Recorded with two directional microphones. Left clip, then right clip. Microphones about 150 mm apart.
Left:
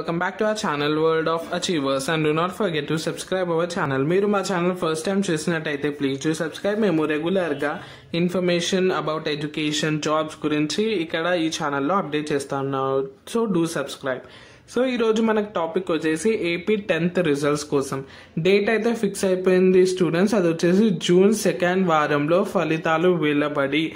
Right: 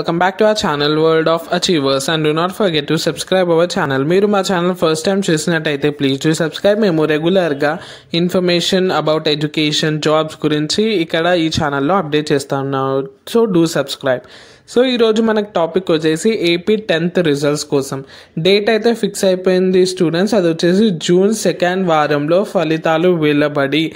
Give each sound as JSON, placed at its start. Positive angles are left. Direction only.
{"t": 0.2, "sound": "speech", "side_deg": -45}